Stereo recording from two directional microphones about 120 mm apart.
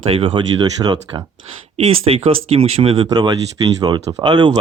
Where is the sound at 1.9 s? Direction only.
55° right (ahead or behind).